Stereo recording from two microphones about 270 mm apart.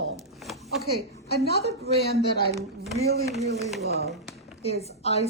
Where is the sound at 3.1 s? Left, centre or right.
Right.